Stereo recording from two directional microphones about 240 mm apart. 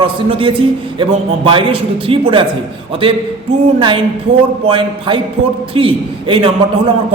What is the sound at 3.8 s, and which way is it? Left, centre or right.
A man's voice, right.